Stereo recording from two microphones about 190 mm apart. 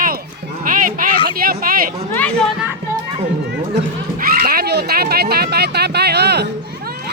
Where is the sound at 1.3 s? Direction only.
50° right (ahead or behind).